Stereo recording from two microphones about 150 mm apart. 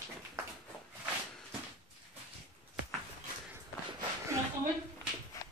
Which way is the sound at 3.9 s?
20° right (ahead or behind).